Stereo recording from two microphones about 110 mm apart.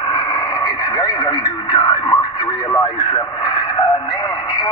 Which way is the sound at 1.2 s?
40° left (ahead or behind).